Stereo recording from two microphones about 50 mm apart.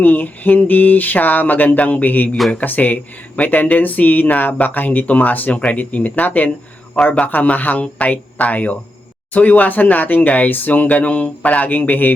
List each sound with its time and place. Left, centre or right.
0.0 s speech: left